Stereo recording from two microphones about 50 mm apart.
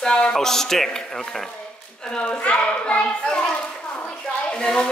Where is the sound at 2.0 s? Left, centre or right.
Left.